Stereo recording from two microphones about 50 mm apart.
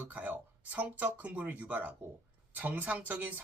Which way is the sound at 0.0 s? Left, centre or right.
Right.